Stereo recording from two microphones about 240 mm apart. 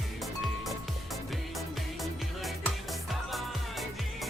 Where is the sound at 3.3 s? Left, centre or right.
Centre.